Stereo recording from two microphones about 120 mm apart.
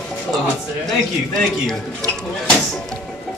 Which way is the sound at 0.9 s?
5° left (ahead or behind).